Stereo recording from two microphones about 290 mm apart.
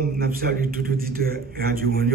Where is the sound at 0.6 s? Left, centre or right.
Right.